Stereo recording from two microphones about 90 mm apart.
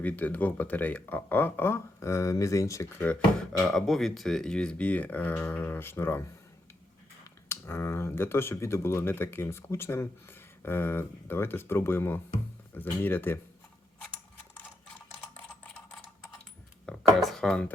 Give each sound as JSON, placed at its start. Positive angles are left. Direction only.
{"t": 0.0, "sound": "speech", "side_deg": 20}
{"t": 3.3, "sound": "speech", "side_deg": 5}
{"t": 7.4, "sound": "speech", "side_deg": 25}
{"t": 16.8, "sound": "speech", "side_deg": 5}